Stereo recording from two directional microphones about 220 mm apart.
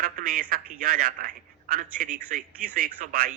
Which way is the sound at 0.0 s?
40° right (ahead or behind).